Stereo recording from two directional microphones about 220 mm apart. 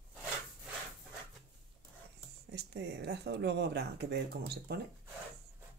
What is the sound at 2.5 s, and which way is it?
Speech, 50° right (ahead or behind).